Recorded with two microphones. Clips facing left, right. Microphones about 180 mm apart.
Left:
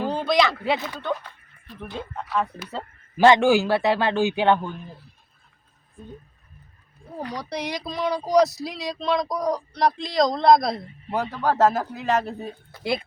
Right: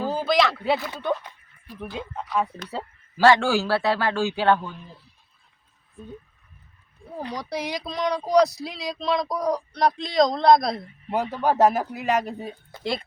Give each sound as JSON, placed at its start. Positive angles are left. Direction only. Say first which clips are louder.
{"t": 0.0, "sound": "a sound", "louder": "even", "side_deg": -5}
{"t": 1.2, "sound": "dog", "louder": "even", "side_deg": -10}
{"t": 3.2, "sound": "speech", "louder": "left 2 dB", "side_deg": 20}
{"t": 7.3, "sound": "speech", "louder": "right 1 dB", "side_deg": 0}
{"t": 11.1, "sound": "speech", "louder": "right 1 dB", "side_deg": -15}
{"t": 12.8, "sound": "speech", "louder": "left 2 dB", "side_deg": 10}